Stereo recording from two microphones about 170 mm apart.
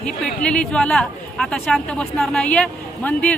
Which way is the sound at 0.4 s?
5° left (ahead or behind).